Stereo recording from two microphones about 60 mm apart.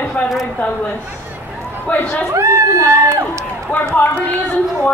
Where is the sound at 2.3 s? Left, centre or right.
Right.